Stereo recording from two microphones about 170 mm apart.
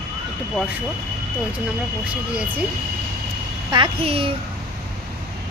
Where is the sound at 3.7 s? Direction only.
30° right (ahead or behind).